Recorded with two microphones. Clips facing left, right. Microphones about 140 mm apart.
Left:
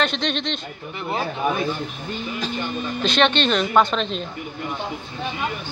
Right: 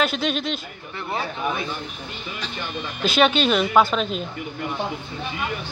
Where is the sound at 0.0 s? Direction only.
5° right (ahead or behind).